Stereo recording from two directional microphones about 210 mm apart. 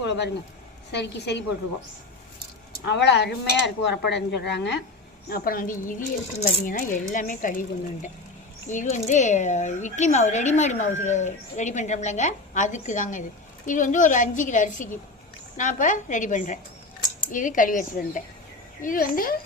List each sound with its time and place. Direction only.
0.0 s a sound: 55° left (ahead or behind)
0.9 s a woman's voice: 55° left (ahead or behind)
2.8 s speech: 55° left (ahead or behind)
5.3 s speech: 45° left (ahead or behind)
8.7 s a woman's voice: 35° left (ahead or behind)